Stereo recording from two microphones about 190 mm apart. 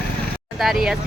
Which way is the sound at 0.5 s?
Centre (ahead or behind).